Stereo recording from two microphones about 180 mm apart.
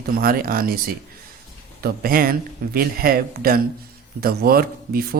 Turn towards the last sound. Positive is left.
turn(degrees=-55)  # may be behind; listen again after turning